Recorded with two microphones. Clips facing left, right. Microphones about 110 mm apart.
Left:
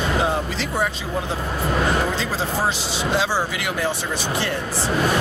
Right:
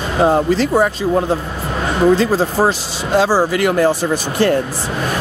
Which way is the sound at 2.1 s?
45° right (ahead or behind).